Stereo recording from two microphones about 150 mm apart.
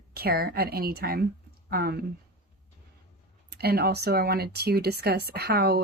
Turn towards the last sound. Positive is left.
turn(degrees=-90)